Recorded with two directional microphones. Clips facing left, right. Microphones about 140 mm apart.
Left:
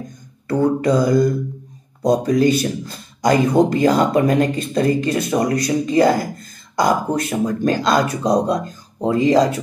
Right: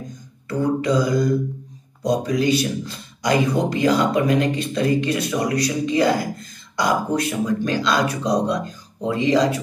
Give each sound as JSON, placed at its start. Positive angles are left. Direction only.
{"t": 0.5, "sound": "mantra", "side_deg": 50}
{"t": 2.0, "sound": "a man's voice", "side_deg": 45}